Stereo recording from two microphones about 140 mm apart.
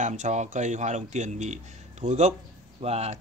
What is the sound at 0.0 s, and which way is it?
Speech, 60° right (ahead or behind).